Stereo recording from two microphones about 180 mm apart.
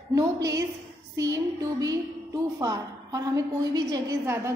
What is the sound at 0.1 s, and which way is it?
A woman's voice, 20° right (ahead or behind).